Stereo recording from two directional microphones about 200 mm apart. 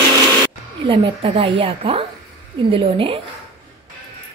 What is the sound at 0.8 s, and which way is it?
A woman's voice, 30° right (ahead or behind).